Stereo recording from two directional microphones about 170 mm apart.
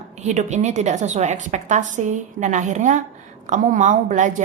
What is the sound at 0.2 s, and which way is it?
A woman's voice, 45° right (ahead or behind).